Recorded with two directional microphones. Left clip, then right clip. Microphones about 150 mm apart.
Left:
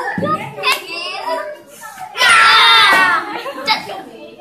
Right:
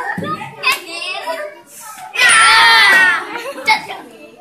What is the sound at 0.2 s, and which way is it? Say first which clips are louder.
Children playing: left 2 dB; 50° right (ahead or behind).